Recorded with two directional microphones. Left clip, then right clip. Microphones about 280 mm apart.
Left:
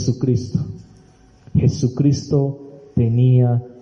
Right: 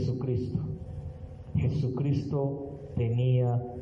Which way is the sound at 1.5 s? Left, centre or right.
Left.